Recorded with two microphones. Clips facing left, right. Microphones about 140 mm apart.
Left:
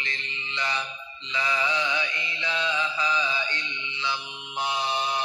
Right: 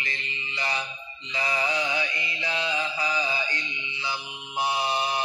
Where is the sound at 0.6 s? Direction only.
40° right (ahead or behind).